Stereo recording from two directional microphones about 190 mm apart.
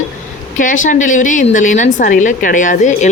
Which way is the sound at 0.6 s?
45° left (ahead or behind).